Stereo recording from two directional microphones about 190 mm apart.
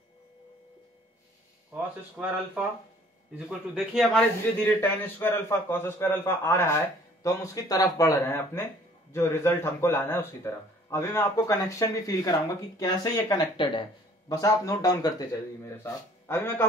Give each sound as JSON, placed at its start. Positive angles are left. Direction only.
{"t": 1.8, "sound": "a man's voice", "side_deg": -10}
{"t": 4.6, "sound": "speech", "side_deg": 10}